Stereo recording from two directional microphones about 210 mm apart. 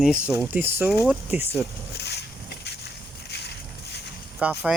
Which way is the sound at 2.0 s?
55° left (ahead or behind).